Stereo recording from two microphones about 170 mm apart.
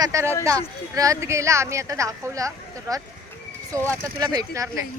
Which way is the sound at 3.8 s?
20° right (ahead or behind).